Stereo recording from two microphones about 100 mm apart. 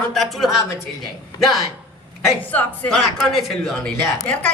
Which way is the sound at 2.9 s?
Centre (ahead or behind).